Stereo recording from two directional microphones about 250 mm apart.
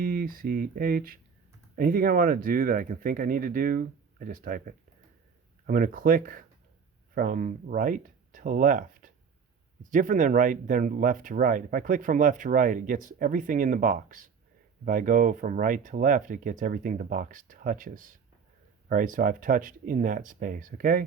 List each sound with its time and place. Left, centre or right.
0.0 s speech: right